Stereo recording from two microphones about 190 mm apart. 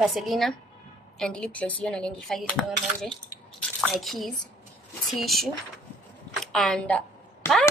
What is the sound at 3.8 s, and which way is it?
A woman's voice, centre (ahead or behind).